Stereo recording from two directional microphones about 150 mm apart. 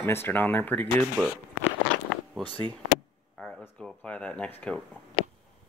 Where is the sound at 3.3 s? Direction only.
5° left (ahead or behind).